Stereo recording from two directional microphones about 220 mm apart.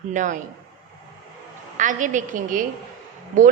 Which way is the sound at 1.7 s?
35° right (ahead or behind).